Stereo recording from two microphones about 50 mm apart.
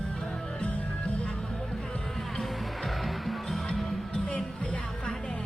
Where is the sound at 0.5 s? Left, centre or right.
Left.